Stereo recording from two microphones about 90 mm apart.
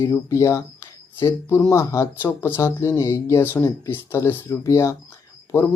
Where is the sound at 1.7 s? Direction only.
35° left (ahead or behind).